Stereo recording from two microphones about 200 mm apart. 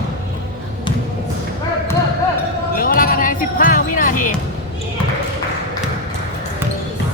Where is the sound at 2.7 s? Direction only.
45° left (ahead or behind).